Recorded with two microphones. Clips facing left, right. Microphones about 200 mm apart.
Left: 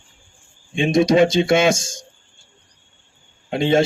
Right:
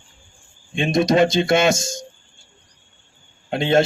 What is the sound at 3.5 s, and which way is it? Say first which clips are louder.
Speech: left 1 dB; 5° left (ahead or behind).